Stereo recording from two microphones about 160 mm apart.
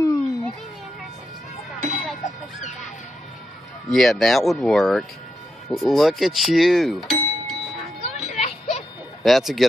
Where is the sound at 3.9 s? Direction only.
Centre (ahead or behind).